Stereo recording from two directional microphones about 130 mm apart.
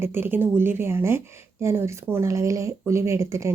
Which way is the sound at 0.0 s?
20° right (ahead or behind).